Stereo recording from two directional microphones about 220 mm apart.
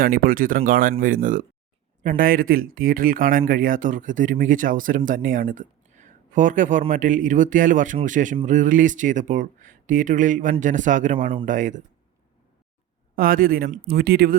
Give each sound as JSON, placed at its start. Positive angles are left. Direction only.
{"t": 0.0, "sound": "speech", "side_deg": -40}
{"t": 13.1, "sound": "speech", "side_deg": -40}